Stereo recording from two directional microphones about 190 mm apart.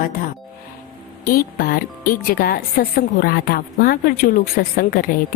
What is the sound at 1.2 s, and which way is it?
Speech, 50° left (ahead or behind).